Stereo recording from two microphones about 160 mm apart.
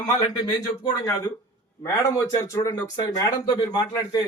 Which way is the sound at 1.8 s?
20° left (ahead or behind).